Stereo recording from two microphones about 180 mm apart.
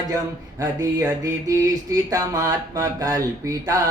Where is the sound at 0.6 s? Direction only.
15° right (ahead or behind).